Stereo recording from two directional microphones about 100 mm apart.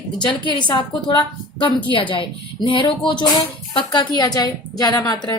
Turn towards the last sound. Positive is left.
turn(degrees=40)  # may be behind; listen again after turning